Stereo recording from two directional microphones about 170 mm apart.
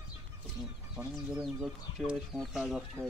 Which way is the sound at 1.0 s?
5° right (ahead or behind).